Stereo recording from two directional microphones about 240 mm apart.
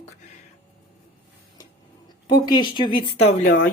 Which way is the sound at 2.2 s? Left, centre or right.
Centre.